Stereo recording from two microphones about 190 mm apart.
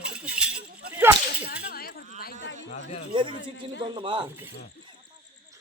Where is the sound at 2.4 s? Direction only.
80° left.